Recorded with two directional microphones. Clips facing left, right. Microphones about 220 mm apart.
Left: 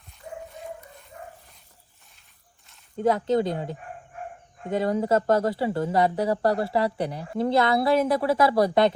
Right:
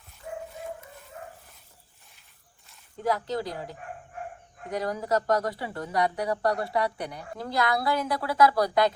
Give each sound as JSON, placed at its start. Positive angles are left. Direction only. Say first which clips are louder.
{"t": 3.0, "sound": "speech", "louder": "left 7 dB", "side_deg": 25}